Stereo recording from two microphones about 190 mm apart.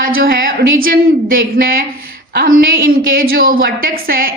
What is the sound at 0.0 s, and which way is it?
Speech, 50° right (ahead or behind).